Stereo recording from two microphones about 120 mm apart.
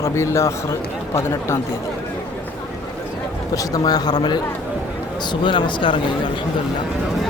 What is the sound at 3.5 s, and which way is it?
A man's voice, 30° left (ahead or behind).